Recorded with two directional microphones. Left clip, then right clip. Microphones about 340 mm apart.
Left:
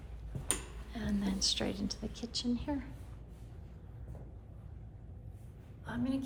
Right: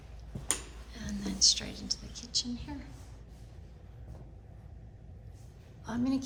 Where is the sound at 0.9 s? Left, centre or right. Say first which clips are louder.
Left 2 dB; centre.